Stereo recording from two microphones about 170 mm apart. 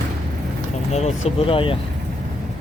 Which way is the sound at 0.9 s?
35° left (ahead or behind).